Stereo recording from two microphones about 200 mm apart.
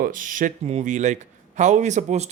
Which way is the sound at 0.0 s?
40° right (ahead or behind).